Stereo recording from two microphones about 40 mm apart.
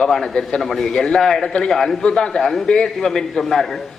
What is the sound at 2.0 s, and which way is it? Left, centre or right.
Speech, left.